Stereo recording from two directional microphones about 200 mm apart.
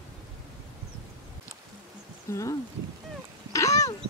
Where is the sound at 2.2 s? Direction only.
15° left (ahead or behind).